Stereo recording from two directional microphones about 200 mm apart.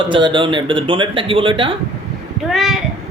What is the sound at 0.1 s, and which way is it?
A man's voice, 25° right (ahead or behind).